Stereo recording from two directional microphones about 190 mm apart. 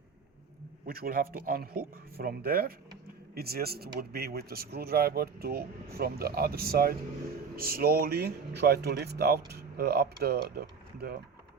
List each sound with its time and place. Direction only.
0.9 s speech: 50° right (ahead or behind)